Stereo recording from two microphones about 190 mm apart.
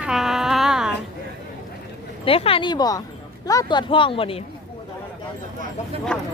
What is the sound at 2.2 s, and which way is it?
Speech, 30° left (ahead or behind).